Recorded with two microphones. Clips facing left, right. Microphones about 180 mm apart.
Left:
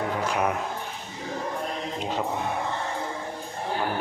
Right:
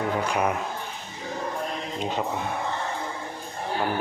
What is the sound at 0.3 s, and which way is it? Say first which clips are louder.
Speech: left 1 dB; centre (ahead or behind).